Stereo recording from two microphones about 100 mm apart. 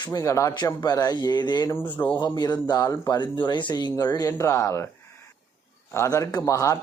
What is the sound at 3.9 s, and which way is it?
Speech, 40° left (ahead or behind).